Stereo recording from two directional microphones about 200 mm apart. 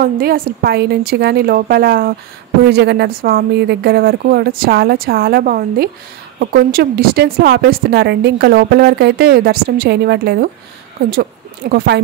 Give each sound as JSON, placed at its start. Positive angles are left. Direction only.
{"t": 0.0, "sound": "a woman's voice", "side_deg": -50}
{"t": 11.7, "sound": "speech", "side_deg": -60}